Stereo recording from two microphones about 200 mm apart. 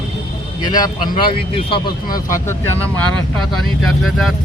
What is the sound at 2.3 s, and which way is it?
Speech, 10° left (ahead or behind).